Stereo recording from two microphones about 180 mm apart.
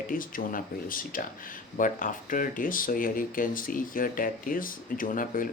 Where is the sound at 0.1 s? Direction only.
50° left (ahead or behind).